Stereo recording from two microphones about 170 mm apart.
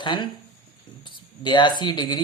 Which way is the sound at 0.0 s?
25° left (ahead or behind).